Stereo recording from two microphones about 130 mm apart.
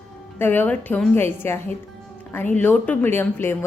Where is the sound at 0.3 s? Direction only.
15° left (ahead or behind).